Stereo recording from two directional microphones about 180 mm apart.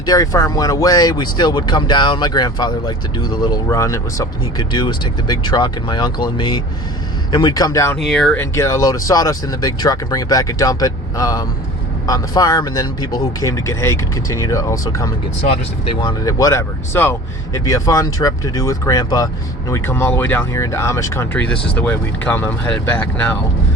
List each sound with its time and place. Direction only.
0.0 s speech: 20° left (ahead or behind)
7.9 s speech: centre (ahead or behind)
8.5 s speech: 15° left (ahead or behind)